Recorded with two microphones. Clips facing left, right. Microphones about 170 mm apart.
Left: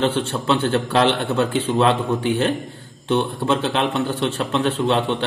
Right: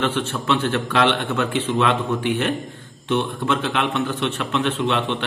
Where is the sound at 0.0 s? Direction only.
30° left (ahead or behind).